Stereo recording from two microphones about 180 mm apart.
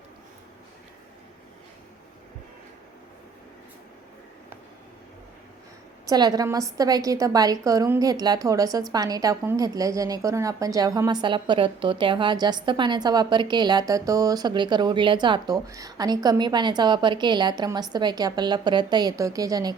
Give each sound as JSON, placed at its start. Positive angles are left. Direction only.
{"t": 6.1, "sound": "a woman's voice", "side_deg": -20}